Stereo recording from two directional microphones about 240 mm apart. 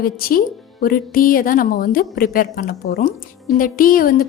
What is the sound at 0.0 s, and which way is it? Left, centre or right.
A woman's voice, left.